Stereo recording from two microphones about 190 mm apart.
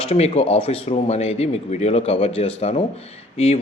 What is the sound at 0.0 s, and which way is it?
Speech, 35° left (ahead or behind).